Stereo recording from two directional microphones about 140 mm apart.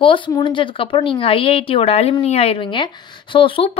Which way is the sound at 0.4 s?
35° left (ahead or behind).